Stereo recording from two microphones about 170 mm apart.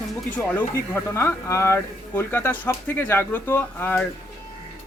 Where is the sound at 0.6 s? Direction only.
15° left (ahead or behind).